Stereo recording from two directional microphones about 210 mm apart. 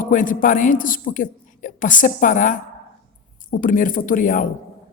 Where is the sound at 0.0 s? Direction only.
40° left (ahead or behind).